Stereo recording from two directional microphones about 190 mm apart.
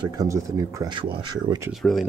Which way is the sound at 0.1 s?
20° right (ahead or behind).